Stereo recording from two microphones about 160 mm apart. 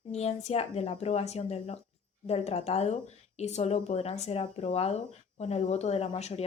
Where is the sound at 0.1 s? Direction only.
40° left (ahead or behind).